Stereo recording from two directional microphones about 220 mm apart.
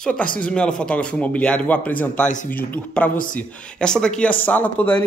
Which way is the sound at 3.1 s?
40° left (ahead or behind).